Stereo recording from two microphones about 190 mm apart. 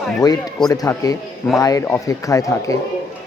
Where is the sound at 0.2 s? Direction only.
20° left (ahead or behind).